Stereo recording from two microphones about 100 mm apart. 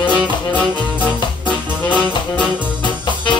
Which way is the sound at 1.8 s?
15° left (ahead or behind).